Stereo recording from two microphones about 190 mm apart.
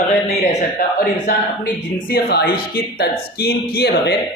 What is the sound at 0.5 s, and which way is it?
Speech, 45° left (ahead or behind).